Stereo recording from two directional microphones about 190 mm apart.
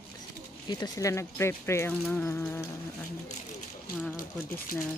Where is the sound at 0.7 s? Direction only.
20° left (ahead or behind).